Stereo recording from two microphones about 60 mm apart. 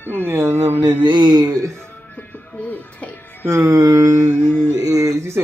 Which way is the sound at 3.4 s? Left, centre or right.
Right.